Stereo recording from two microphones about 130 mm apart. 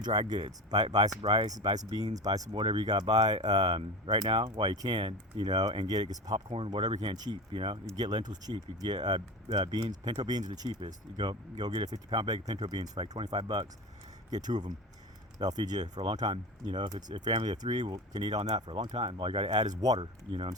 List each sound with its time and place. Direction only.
0.0 s speech: 30° right (ahead or behind)
0.9 s speech: 55° right (ahead or behind)
2.1 s speech: 30° right (ahead or behind)
2.5 s speech: 45° right (ahead or behind)
18.3 s speech: 50° right (ahead or behind)
18.6 s speech: 35° right (ahead or behind)
18.9 s speech: 45° right (ahead or behind)
19.8 s speech: 30° right (ahead or behind)